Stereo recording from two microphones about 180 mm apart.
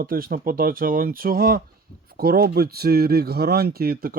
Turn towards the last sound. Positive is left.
turn(degrees=-55)  # may be behind; listen again after turning